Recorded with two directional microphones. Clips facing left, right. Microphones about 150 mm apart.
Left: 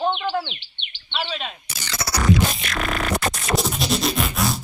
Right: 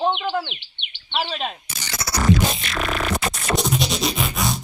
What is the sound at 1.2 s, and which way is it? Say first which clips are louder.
Speech: right 2 dB; 40° right (ahead or behind).